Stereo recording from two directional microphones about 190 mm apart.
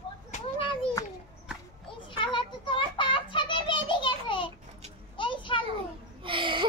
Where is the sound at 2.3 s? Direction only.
25° left (ahead or behind).